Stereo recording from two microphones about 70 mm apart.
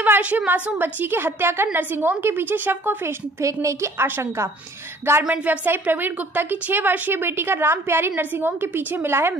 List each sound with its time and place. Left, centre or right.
0.0 s a sound: right
0.5 s a woman's voice: right
3.4 s a woman's voice: right
5.3 s a woman's voice: right